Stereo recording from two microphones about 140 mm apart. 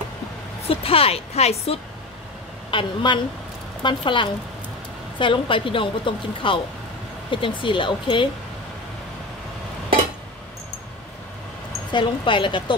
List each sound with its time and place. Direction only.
0.6 s speech: 45° left (ahead or behind)
2.7 s a woman's voice: 35° left (ahead or behind)
11.9 s a woman's voice: 35° left (ahead or behind)